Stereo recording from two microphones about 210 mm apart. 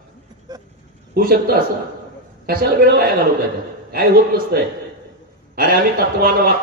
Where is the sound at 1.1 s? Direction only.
45° right (ahead or behind).